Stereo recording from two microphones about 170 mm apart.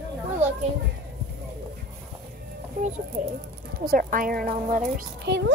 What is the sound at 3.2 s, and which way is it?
A woman's voice, 45° right (ahead or behind).